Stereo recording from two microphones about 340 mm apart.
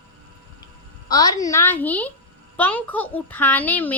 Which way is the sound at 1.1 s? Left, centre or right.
Centre.